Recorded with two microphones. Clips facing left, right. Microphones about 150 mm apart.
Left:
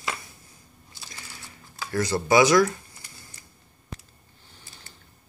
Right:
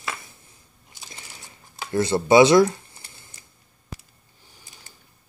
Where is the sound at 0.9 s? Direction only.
20° right (ahead or behind).